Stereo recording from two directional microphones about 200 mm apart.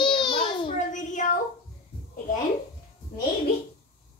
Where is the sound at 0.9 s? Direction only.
40° left (ahead or behind).